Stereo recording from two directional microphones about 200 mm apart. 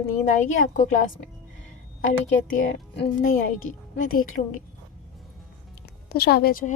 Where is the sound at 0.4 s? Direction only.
40° left (ahead or behind).